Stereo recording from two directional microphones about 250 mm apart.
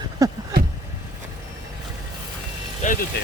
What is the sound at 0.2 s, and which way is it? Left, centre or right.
Vehicle, centre.